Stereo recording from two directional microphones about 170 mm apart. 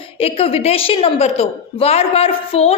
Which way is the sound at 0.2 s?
35° left (ahead or behind).